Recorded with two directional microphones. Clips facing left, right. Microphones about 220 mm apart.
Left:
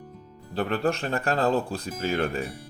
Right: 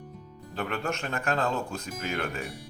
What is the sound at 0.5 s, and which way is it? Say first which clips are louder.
Speech: left 6 dB; 35° left (ahead or behind).